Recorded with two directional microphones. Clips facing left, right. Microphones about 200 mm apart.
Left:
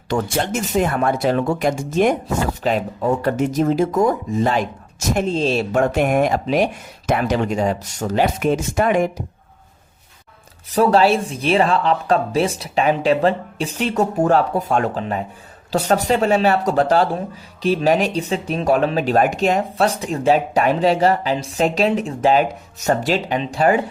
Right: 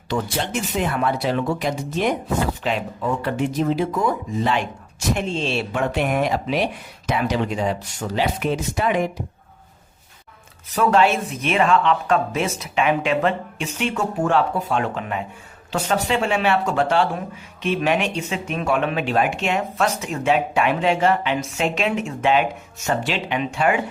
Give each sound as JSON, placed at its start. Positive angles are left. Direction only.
{"t": 0.1, "sound": "speech", "side_deg": 45}
{"t": 10.7, "sound": "speech", "side_deg": 35}